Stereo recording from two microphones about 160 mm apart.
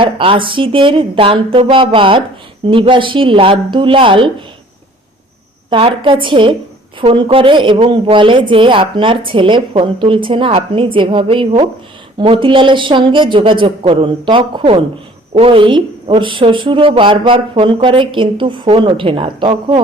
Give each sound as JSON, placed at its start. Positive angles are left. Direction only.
{"t": 0.0, "sound": "a woman's voice", "side_deg": -35}
{"t": 5.7, "sound": "a woman's voice", "side_deg": -30}